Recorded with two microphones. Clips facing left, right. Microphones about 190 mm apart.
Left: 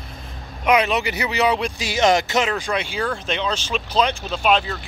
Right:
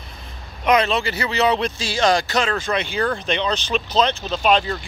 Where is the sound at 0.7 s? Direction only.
10° left (ahead or behind).